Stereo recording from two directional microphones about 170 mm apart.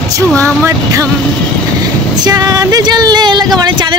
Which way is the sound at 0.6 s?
15° right (ahead or behind).